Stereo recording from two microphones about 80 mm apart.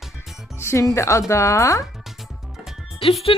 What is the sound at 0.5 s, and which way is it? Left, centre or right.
Speech, left.